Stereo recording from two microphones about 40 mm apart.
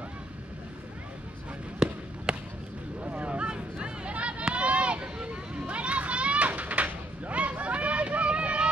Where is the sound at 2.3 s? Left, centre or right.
Right.